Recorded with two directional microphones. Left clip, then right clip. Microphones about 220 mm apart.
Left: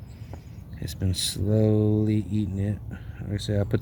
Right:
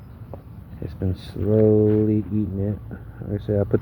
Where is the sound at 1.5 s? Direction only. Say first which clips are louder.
Right 8 dB; 50° left (ahead or behind).